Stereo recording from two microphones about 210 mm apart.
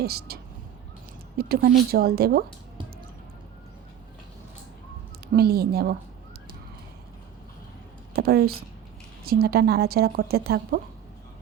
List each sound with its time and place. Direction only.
0.0 s speech: 50° right (ahead or behind)
1.4 s speech: 45° right (ahead or behind)
5.3 s speech: 50° right (ahead or behind)
8.1 s speech: 45° right (ahead or behind)